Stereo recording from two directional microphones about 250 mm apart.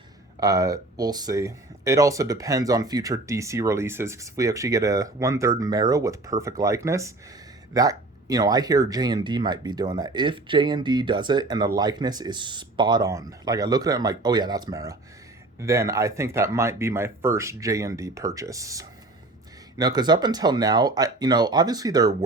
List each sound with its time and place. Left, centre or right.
0.3 s speech: centre